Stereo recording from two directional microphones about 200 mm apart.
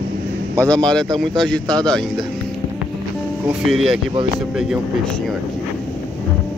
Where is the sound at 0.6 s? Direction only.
5° left (ahead or behind).